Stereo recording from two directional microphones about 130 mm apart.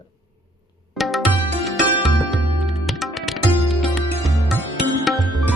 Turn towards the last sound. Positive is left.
turn(degrees=0)  # may be behind; listen again after turning